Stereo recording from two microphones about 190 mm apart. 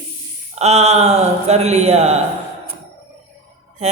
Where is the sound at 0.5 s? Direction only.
35° right (ahead or behind).